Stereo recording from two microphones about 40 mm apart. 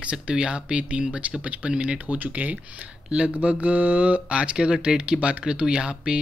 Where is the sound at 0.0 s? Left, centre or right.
Right.